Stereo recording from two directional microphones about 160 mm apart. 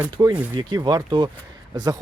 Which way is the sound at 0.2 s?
20° right (ahead or behind).